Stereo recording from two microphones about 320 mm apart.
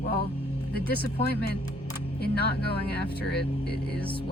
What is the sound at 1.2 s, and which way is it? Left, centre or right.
Speech, left.